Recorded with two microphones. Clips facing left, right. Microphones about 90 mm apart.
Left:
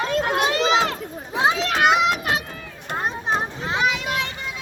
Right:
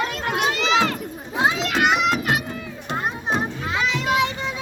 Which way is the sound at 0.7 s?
30° left (ahead or behind).